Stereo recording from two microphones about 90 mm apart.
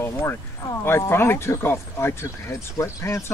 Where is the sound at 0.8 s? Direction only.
30° left (ahead or behind).